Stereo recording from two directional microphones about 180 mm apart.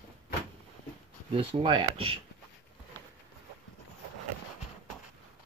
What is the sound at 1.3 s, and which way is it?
Speech, 25° right (ahead or behind).